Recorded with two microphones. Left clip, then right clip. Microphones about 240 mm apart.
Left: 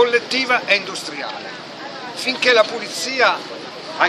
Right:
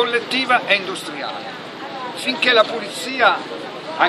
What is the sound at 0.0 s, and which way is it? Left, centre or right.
Speech, centre.